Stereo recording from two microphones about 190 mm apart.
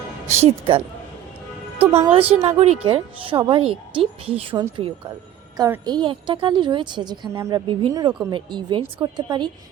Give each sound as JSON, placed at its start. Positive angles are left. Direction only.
{"t": 0.3, "sound": "speech", "side_deg": -35}
{"t": 2.0, "sound": "a woman's voice", "side_deg": -30}
{"t": 5.5, "sound": "a woman's voice", "side_deg": -20}